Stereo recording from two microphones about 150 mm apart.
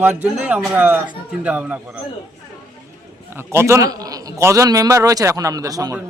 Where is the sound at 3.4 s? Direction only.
15° right (ahead or behind).